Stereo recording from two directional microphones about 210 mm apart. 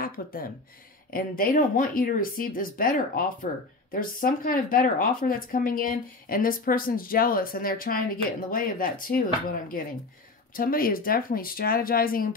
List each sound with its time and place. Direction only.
0.0 s speech: 45° left (ahead or behind)